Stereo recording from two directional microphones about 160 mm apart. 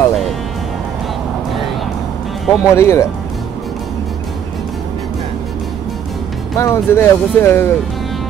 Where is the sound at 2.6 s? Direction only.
20° left (ahead or behind).